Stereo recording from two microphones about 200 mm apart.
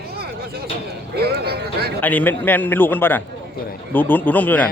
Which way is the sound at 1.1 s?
50° right (ahead or behind).